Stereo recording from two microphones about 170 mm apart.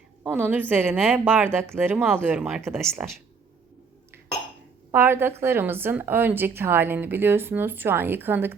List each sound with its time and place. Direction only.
0.2 s a woman's voice: 10° right (ahead or behind)
4.9 s a woman's voice: 15° right (ahead or behind)